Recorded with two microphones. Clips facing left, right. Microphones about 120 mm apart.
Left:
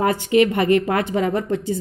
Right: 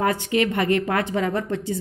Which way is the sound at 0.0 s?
15° left (ahead or behind).